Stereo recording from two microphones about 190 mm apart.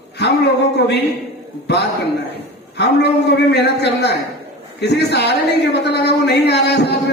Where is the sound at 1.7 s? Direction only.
60° left (ahead or behind).